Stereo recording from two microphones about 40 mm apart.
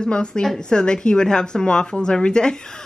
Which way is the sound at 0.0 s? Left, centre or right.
Left.